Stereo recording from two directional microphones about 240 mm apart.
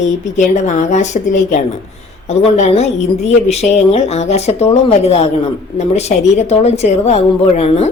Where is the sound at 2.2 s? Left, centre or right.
Left.